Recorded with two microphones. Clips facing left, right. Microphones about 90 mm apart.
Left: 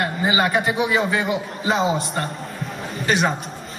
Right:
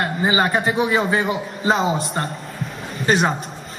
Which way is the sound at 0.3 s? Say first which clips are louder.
Right 1 dB; 30° right (ahead or behind).